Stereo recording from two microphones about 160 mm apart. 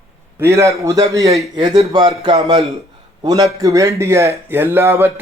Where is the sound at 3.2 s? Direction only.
20° right (ahead or behind).